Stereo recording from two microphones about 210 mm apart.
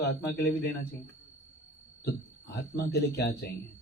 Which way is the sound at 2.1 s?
50° left (ahead or behind).